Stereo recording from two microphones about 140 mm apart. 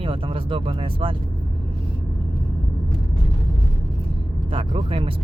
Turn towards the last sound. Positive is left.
turn(degrees=-40)  # may be behind; listen again after turning